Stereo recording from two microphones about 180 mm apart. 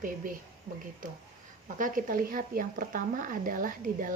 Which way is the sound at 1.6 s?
50° right (ahead or behind).